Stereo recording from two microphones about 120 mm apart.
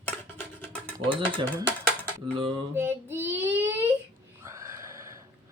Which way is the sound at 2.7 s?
20° right (ahead or behind).